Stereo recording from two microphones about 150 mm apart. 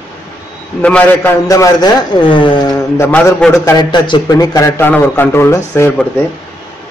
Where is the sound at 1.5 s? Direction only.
25° left (ahead or behind).